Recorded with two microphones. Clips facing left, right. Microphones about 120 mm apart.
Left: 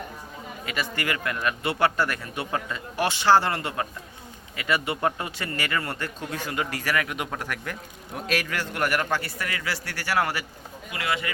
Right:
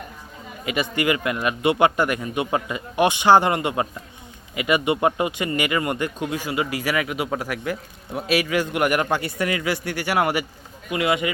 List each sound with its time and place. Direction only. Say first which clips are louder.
0.6 s speech: right 7 dB; 20° right (ahead or behind)